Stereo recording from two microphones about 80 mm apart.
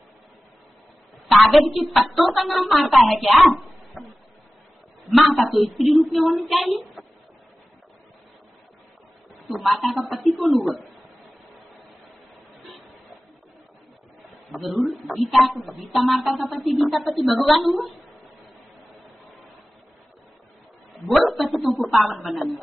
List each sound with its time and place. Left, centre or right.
1.3 s a woman's voice: centre
5.0 s a woman's voice: centre
6.7 s a sound: centre
9.3 s a woman's voice: centre
14.5 s a woman's voice: centre
20.9 s a sound: centre